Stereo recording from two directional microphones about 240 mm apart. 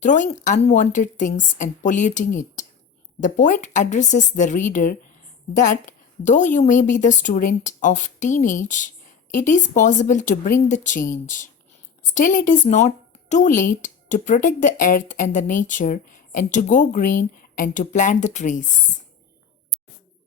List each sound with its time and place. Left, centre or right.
0.0 s speech: left
6.2 s speech: left